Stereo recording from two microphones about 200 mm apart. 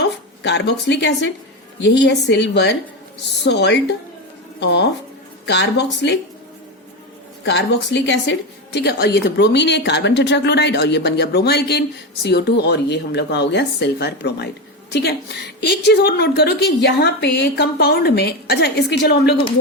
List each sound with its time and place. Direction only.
0.0 s a woman's voice: 60° left (ahead or behind)
7.4 s a woman's voice: 60° left (ahead or behind)